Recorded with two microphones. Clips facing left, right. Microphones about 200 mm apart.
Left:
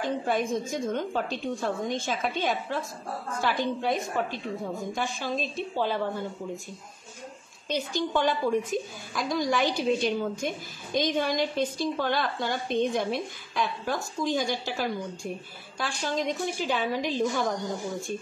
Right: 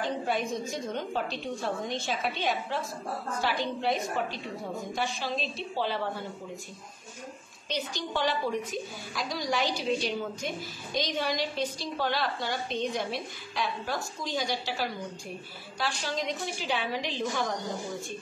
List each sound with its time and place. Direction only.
0.0 s a woman's voice: 50° left (ahead or behind)
7.7 s a woman's voice: 50° left (ahead or behind)